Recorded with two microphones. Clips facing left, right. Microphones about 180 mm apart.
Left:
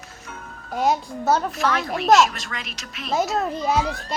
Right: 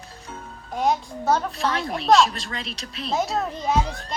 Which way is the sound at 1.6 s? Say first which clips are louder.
Left 2 dB; 30° right (ahead or behind).